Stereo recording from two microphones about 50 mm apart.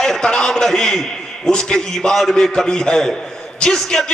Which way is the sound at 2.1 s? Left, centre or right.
Centre.